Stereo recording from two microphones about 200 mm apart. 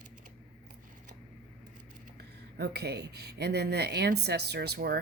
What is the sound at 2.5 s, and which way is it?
Speech, 55° right (ahead or behind).